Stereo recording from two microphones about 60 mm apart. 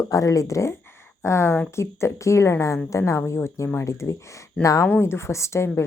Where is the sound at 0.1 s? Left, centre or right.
Left.